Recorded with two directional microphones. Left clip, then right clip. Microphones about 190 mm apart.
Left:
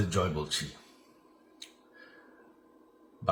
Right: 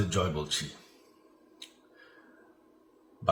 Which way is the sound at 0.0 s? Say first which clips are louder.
Even; 5° right (ahead or behind).